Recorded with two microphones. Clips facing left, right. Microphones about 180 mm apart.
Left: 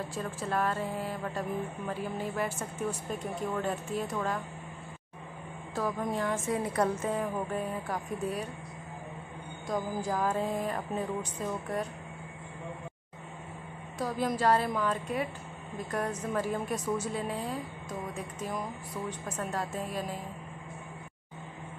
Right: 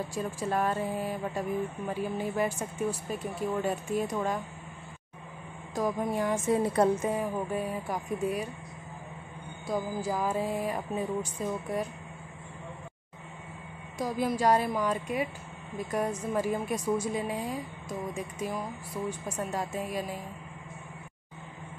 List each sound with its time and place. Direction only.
0.1 s a woman's voice: 15° right (ahead or behind)
5.8 s a woman's voice: 15° right (ahead or behind)
6.7 s a woman's voice: 25° right (ahead or behind)
7.1 s a woman's voice: 10° right (ahead or behind)
9.7 s a woman's voice: 5° right (ahead or behind)
13.9 s a woman's voice: 10° right (ahead or behind)